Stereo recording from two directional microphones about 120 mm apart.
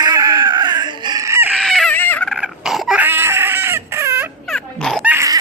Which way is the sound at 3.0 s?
20° right (ahead or behind).